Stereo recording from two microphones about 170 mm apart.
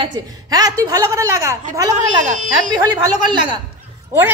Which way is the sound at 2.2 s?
45° right (ahead or behind).